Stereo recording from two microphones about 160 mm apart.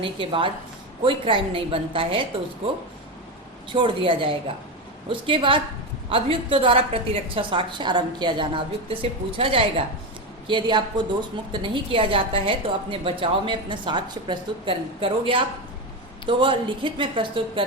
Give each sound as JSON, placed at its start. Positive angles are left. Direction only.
{"t": 0.0, "sound": "a woman's voice", "side_deg": -35}
{"t": 3.7, "sound": "a woman's voice", "side_deg": -30}